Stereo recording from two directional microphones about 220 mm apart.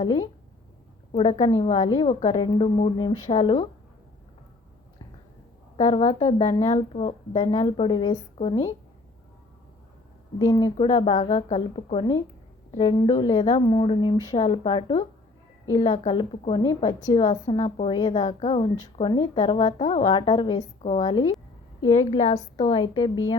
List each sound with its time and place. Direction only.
0.0 s a woman's voice: 20° left (ahead or behind)
5.7 s a woman's voice: 30° left (ahead or behind)
10.3 s a woman's voice: 15° left (ahead or behind)